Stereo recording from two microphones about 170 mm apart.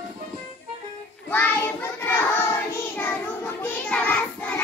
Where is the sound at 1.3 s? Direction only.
10° left (ahead or behind).